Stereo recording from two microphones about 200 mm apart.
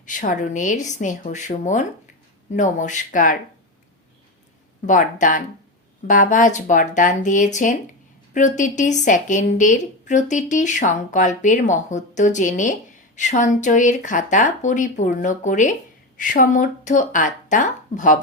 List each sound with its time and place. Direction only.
0.0 s a woman's voice: 40° left (ahead or behind)
4.9 s a woman's voice: 40° left (ahead or behind)